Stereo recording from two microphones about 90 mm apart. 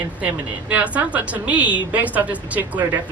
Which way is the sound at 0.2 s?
15° right (ahead or behind).